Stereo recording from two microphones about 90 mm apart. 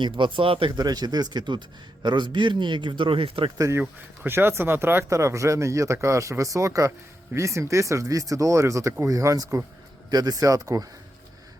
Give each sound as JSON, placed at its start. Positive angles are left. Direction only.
{"t": 0.0, "sound": "speech", "side_deg": -65}
{"t": 0.8, "sound": "a man's voice", "side_deg": -45}
{"t": 3.6, "sound": "speech", "side_deg": -35}